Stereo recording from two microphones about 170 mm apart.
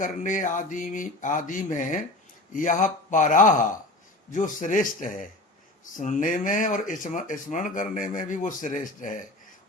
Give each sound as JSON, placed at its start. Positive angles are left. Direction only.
{"t": 0.0, "sound": "speech", "side_deg": 50}